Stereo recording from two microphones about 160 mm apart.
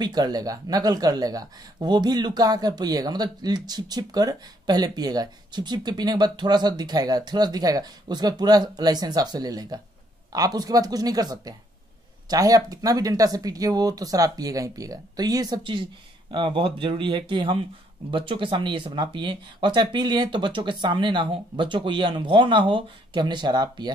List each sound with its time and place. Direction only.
0.0 s speech: 25° right (ahead or behind)